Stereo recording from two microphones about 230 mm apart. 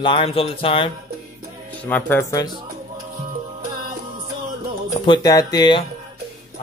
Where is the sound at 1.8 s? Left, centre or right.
Centre.